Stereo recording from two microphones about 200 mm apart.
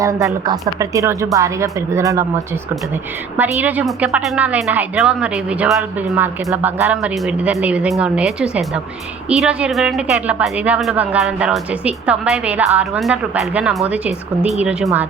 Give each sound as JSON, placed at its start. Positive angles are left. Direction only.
{"t": 0.0, "sound": "a woman's voice", "side_deg": -15}
{"t": 3.3, "sound": "a woman's voice", "side_deg": -10}